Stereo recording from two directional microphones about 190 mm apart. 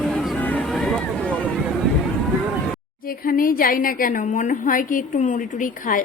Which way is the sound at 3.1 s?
50° left (ahead or behind).